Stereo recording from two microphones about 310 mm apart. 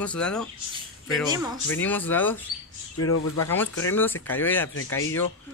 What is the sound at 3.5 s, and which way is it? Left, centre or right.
Speech, centre.